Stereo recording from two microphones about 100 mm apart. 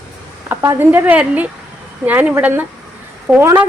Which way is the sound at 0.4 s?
25° right (ahead or behind).